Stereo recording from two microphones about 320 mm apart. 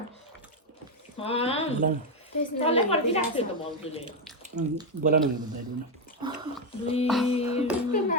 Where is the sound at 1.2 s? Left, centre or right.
Centre.